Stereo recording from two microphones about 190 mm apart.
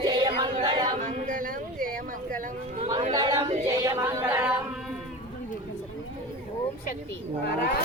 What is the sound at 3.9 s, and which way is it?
Speech, 15° right (ahead or behind).